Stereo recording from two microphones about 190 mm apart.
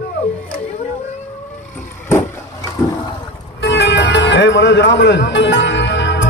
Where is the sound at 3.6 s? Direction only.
65° left (ahead or behind).